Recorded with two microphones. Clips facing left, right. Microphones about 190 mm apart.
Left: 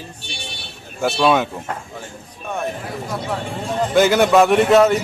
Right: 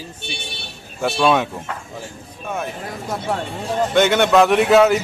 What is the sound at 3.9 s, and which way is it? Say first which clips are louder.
A man's voice: left 1 dB; 5° left (ahead or behind).